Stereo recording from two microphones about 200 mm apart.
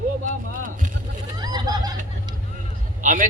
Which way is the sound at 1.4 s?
20° right (ahead or behind).